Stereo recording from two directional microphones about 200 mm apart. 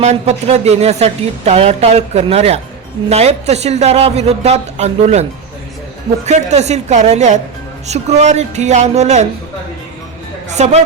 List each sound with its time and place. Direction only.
0.0 s speech: 35° right (ahead or behind)
6.2 s speech: 35° right (ahead or behind)
10.5 s speech: 35° right (ahead or behind)